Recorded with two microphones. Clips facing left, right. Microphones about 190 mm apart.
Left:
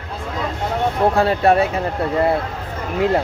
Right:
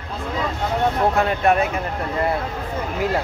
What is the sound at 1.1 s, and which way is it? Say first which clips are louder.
Speech: left 3 dB; 35° left (ahead or behind).